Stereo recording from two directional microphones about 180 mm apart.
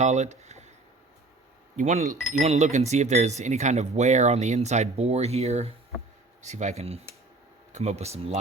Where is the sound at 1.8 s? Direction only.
40° right (ahead or behind).